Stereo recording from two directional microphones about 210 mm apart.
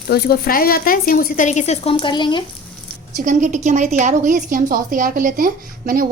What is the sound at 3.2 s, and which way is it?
A woman's voice, 35° right (ahead or behind).